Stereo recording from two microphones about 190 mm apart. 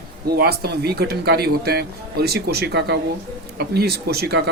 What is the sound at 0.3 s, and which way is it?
Speech, 55° right (ahead or behind).